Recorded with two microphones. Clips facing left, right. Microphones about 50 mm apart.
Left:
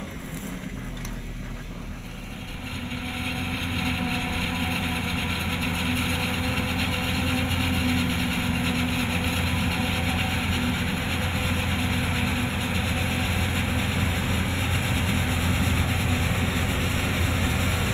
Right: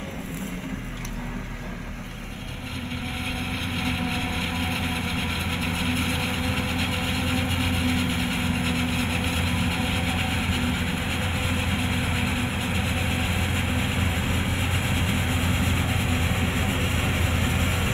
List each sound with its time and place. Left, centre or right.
3.7 s vehicle: centre; by 17.9 s right